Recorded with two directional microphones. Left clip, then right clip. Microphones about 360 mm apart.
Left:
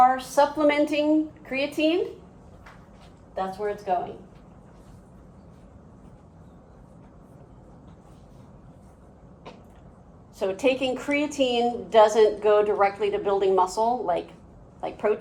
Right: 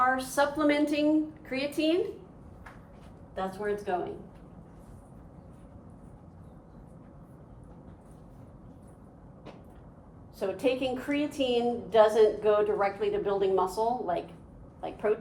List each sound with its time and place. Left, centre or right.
0.0 s a woman's voice: centre
3.3 s a woman's voice: centre
10.4 s a woman's voice: left